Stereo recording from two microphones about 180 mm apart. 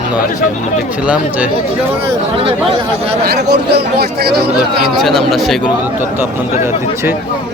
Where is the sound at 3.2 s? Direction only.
65° right (ahead or behind).